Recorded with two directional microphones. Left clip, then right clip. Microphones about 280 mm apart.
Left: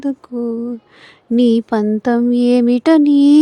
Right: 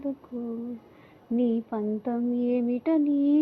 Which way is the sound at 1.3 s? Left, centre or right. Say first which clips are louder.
Left 13 dB; left.